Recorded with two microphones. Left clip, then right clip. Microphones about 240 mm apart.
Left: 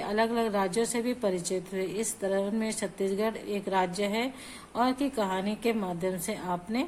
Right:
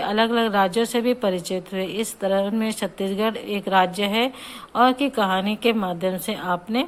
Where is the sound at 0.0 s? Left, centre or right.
Centre.